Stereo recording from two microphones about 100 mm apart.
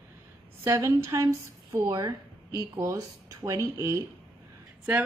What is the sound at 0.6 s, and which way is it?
Speech, 30° right (ahead or behind).